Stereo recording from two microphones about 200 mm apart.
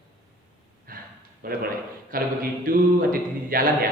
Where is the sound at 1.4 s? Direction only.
45° right (ahead or behind).